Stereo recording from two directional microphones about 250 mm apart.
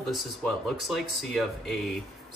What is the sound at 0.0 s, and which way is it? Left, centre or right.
Speech, centre.